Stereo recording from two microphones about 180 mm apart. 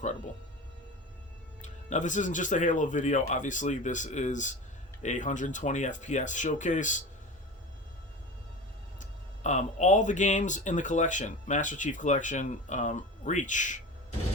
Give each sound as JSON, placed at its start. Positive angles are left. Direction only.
{"t": 1.6, "sound": "speech", "side_deg": 40}
{"t": 9.0, "sound": "speech", "side_deg": 40}